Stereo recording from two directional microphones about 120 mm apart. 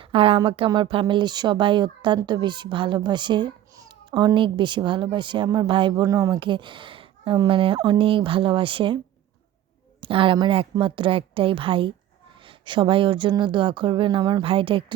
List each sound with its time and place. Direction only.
0.0 s speech: 50° right (ahead or behind)
6.1 s speech: 30° right (ahead or behind)
10.0 s speech: 45° right (ahead or behind)